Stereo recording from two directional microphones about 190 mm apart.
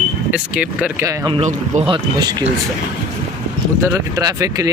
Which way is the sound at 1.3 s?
35° right (ahead or behind).